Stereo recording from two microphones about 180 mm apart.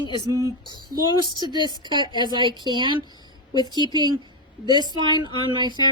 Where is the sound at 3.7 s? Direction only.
25° right (ahead or behind).